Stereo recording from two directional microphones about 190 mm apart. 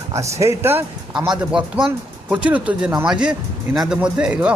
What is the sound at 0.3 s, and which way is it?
Speech, 15° right (ahead or behind).